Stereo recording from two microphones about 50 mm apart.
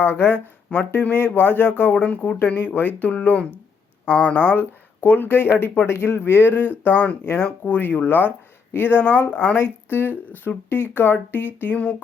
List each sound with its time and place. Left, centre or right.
0.0 s speech: left
1.1 s speech: left
1.9 s speech: left
2.7 s speech: left